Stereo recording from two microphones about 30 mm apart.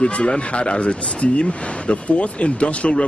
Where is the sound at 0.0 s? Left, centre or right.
Left.